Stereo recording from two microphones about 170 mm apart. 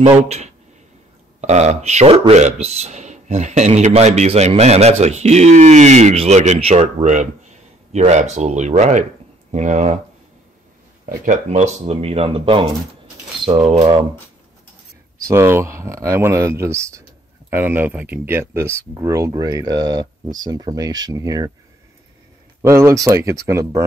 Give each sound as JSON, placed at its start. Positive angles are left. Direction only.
{"t": 1.4, "sound": "speech", "side_deg": -40}
{"t": 11.1, "sound": "speech", "side_deg": -45}
{"t": 15.2, "sound": "speech", "side_deg": -15}
{"t": 22.6, "sound": "speech", "side_deg": -15}